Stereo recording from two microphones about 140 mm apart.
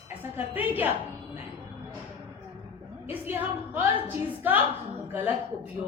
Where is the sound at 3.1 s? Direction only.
15° right (ahead or behind).